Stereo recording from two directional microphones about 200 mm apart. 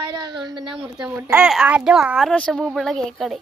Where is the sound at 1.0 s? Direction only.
5° right (ahead or behind).